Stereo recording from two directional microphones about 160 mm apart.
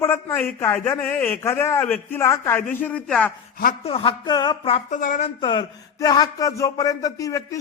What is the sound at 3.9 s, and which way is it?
Speech, 35° left (ahead or behind).